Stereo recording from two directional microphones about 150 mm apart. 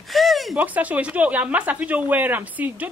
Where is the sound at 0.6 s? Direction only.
10° right (ahead or behind).